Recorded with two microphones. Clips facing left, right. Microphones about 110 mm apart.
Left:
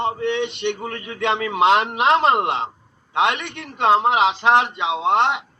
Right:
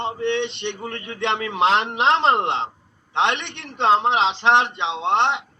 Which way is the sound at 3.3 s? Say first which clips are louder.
Even; 25° right (ahead or behind).